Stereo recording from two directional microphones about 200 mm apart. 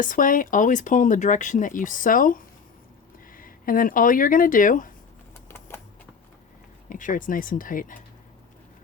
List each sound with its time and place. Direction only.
0.0 s speech: 40° left (ahead or behind)
5.5 s typewriter: 10° left (ahead or behind)
6.9 s speech: 40° left (ahead or behind)